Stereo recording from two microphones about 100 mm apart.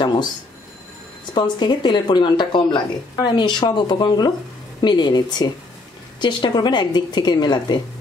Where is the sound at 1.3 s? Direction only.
50° left (ahead or behind).